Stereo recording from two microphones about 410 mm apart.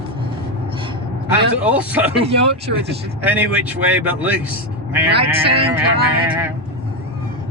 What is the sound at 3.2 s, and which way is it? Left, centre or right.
A man's voice, centre.